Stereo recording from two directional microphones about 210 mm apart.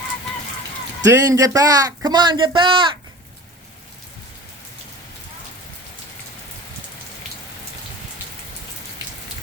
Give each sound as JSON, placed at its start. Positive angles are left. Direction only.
{"t": 1.0, "sound": "speech", "side_deg": -15}